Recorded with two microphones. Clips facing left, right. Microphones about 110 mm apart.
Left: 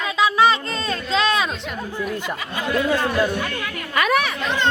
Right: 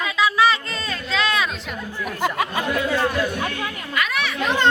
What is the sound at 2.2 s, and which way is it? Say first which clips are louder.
Speech: right 5 dB; 50° right (ahead or behind).